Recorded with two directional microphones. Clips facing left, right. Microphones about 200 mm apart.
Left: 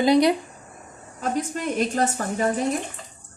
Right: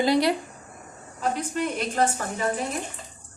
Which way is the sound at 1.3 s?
45° left (ahead or behind).